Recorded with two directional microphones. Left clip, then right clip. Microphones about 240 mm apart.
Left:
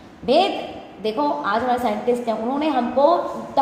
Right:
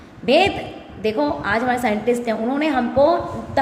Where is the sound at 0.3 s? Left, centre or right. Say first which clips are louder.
Right 2 dB; right.